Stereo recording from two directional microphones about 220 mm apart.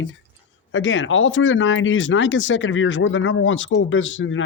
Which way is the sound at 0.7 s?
60° left (ahead or behind).